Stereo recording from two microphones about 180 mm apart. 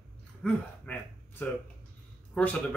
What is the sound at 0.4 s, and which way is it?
Speech, 5° left (ahead or behind).